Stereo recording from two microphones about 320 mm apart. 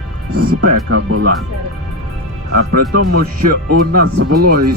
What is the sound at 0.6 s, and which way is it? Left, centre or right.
Speech, right.